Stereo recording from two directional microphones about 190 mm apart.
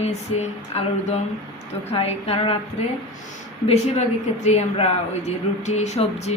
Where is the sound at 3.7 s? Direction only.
35° left (ahead or behind).